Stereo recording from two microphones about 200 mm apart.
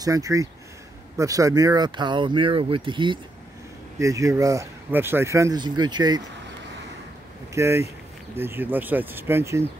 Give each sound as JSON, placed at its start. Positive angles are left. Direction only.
{"t": 0.0, "sound": "speech", "side_deg": -15}
{"t": 7.5, "sound": "speech", "side_deg": -15}